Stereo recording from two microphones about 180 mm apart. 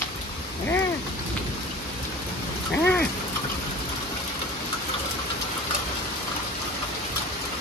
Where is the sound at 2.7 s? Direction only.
5° left (ahead or behind).